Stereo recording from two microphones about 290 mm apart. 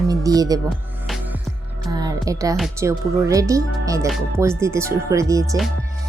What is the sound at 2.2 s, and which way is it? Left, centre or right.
A woman's voice, centre.